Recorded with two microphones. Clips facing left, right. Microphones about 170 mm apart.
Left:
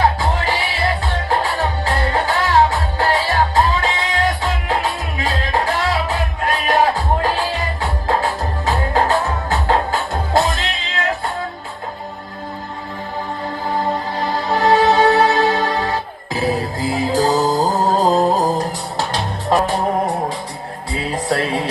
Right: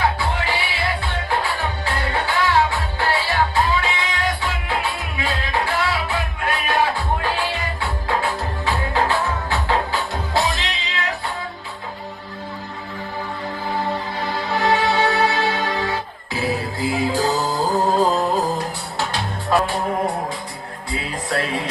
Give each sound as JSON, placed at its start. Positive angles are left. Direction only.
{"t": 0.0, "sound": "music", "side_deg": 40}
{"t": 14.2, "sound": "music", "side_deg": 40}
{"t": 21.2, "sound": "music", "side_deg": 30}